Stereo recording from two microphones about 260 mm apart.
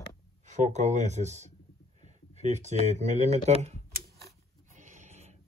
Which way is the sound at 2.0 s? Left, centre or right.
Right.